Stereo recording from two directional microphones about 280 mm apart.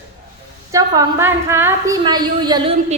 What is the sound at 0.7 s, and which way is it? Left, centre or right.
A woman's voice, centre.